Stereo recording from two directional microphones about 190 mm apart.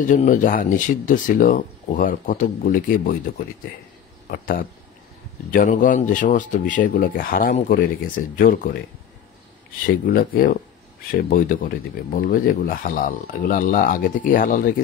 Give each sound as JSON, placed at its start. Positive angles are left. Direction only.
{"t": 0.0, "sound": "speech", "side_deg": 45}
{"t": 4.3, "sound": "speech", "side_deg": 50}
{"t": 10.0, "sound": "speech", "side_deg": 50}